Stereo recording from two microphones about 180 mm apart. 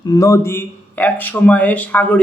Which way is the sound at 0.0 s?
20° left (ahead or behind).